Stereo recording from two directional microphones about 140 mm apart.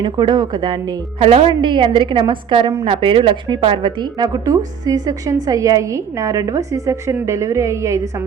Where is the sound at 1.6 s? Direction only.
35° right (ahead or behind).